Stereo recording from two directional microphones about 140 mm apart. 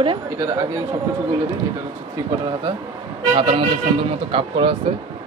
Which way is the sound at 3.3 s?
35° right (ahead or behind).